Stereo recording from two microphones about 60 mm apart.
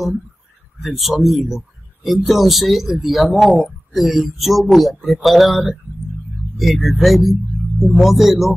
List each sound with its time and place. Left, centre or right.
0.8 s speech: centre